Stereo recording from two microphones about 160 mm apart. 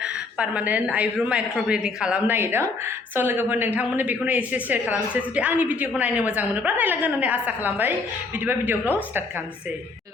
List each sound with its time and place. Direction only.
0.0 s speech: 5° right (ahead or behind)